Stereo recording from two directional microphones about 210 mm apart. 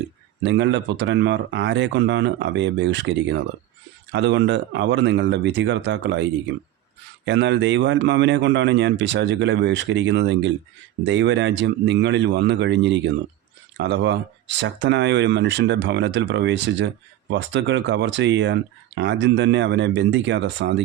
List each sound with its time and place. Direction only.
0.4 s speech: 60° right (ahead or behind)